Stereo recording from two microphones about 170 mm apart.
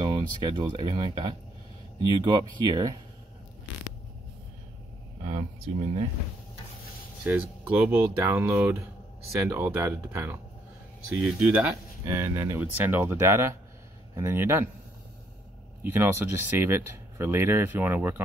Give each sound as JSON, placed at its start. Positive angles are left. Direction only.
{"t": 0.0, "sound": "speech", "side_deg": -25}
{"t": 5.2, "sound": "speech", "side_deg": -35}
{"t": 7.2, "sound": "speech", "side_deg": -10}
{"t": 12.0, "sound": "speech", "side_deg": -15}
{"t": 15.8, "sound": "speech", "side_deg": -10}